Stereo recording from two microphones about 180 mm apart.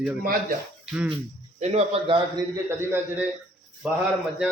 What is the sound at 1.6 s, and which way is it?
Speech, 35° right (ahead or behind).